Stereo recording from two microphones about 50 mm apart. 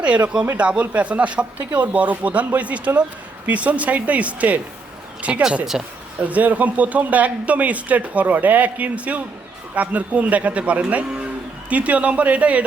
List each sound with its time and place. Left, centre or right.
0.0 s speech: right
5.7 s speech: centre
6.1 s speech: right